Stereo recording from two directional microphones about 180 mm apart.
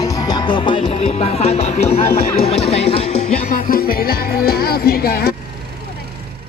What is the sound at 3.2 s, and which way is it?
Music, 45° left (ahead or behind).